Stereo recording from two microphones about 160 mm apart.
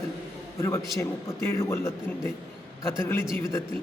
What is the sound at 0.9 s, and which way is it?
A man's voice, 20° left (ahead or behind).